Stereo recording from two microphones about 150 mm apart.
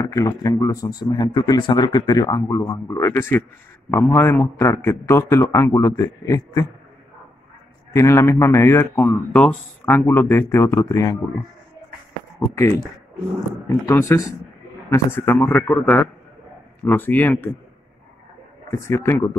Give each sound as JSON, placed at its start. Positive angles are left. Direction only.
{"t": 0.0, "sound": "speech", "side_deg": 25}
{"t": 7.9, "sound": "speech", "side_deg": 20}
{"t": 13.8, "sound": "speech", "side_deg": 20}
{"t": 18.7, "sound": "speech", "side_deg": 20}